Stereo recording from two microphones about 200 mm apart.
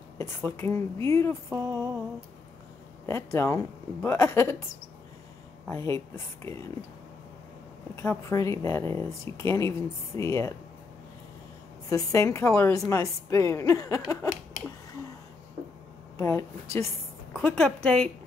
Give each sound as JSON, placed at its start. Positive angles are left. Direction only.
{"t": 0.2, "sound": "speech", "side_deg": 10}
{"t": 3.1, "sound": "speech", "side_deg": 15}
{"t": 5.7, "sound": "speech", "side_deg": 15}
{"t": 7.9, "sound": "speech", "side_deg": 15}
{"t": 11.9, "sound": "speech", "side_deg": 15}
{"t": 16.2, "sound": "a woman's voice", "side_deg": 15}